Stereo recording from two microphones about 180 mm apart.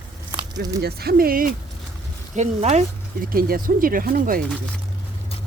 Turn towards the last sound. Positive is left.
turn(degrees=-50)  # may be behind; listen again after turning